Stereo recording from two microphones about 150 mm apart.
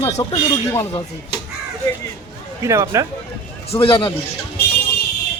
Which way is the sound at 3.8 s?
35° left (ahead or behind).